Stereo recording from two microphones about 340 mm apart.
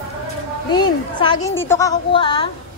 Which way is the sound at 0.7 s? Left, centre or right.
Centre.